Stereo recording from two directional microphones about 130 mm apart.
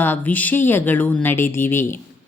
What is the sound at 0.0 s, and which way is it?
A woman's voice, 15° left (ahead or behind).